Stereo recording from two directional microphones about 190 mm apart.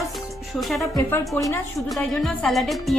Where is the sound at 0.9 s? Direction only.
15° left (ahead or behind).